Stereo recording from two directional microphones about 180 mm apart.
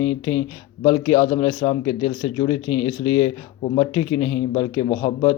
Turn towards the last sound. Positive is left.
turn(degrees=20)  # may be behind; listen again after turning